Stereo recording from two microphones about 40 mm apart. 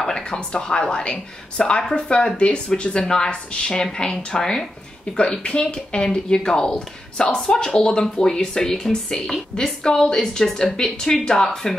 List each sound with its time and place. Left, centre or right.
0.0 s speech: centre
6.0 s speech: centre
9.8 s speech: left
10.1 s speech: centre